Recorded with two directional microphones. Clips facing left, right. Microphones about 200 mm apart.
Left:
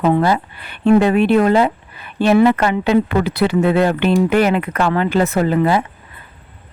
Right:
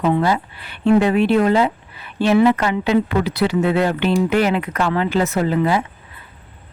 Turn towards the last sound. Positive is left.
turn(degrees=55)  # may be behind; listen again after turning